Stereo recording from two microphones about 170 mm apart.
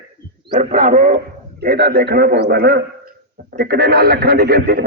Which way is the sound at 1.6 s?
65° right (ahead or behind).